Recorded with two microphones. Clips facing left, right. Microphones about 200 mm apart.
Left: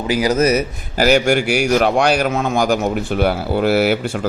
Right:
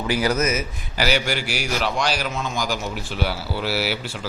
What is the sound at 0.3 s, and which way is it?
A man's voice, 35° left (ahead or behind).